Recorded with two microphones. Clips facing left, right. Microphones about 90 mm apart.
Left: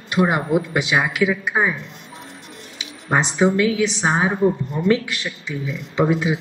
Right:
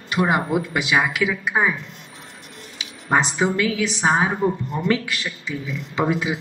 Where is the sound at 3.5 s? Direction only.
30° left (ahead or behind).